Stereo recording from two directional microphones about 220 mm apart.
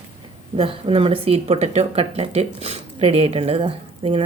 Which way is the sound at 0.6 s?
25° right (ahead or behind).